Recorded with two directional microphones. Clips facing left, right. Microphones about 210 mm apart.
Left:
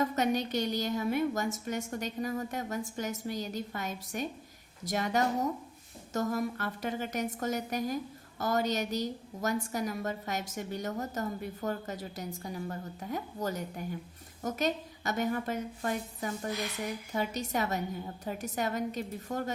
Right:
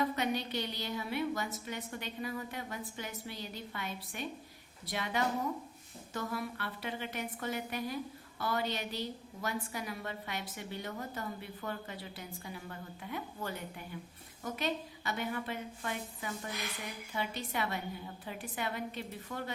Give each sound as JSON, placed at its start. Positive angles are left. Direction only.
{"t": 0.0, "sound": "a woman's voice", "side_deg": 45}